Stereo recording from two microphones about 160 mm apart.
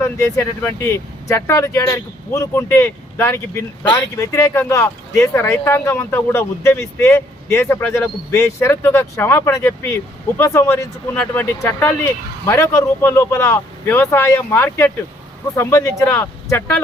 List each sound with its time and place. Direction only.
0.0 s speech: 15° left (ahead or behind)